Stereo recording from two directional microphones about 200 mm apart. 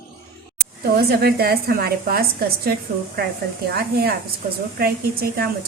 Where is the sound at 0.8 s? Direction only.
50° right (ahead or behind).